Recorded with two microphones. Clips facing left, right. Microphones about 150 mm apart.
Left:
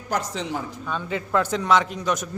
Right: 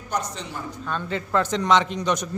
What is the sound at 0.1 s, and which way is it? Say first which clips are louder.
Speech: left 3 dB; 90° left.